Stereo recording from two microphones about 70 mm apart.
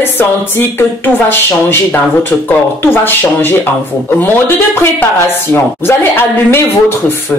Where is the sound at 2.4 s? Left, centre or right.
Left.